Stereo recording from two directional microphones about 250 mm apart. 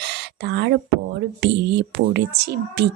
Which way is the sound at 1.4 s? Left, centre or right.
Right.